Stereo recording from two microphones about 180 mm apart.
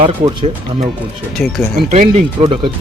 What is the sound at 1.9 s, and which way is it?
Speech, 35° right (ahead or behind).